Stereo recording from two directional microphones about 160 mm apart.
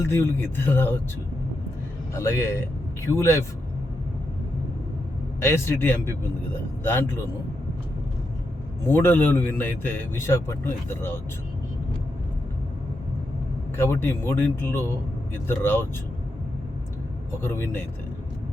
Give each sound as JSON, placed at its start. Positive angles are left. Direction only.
{"t": 0.0, "sound": "a man's voice", "side_deg": 15}
{"t": 2.1, "sound": "speech", "side_deg": 15}
{"t": 5.4, "sound": "a man's voice", "side_deg": 15}
{"t": 8.9, "sound": "a man's voice", "side_deg": 15}
{"t": 13.7, "sound": "a man's voice", "side_deg": 15}
{"t": 17.4, "sound": "a man's voice", "side_deg": 15}